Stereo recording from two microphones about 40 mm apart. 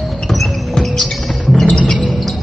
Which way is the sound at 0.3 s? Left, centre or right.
Centre.